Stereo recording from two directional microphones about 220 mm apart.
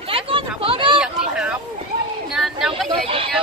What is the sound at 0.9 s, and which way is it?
Speech, 5° right (ahead or behind).